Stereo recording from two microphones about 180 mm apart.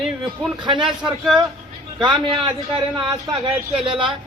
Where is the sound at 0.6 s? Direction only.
25° right (ahead or behind).